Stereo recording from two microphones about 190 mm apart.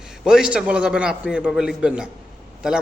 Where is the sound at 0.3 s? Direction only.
5° right (ahead or behind).